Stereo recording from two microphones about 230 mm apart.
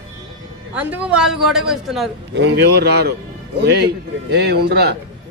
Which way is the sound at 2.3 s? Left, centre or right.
Right.